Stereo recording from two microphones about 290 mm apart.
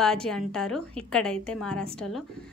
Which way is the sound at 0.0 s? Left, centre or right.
Centre.